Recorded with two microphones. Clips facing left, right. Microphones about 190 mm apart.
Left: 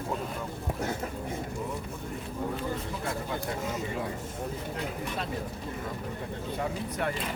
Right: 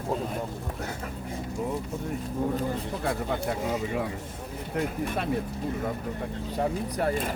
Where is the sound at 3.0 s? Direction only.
60° right (ahead or behind).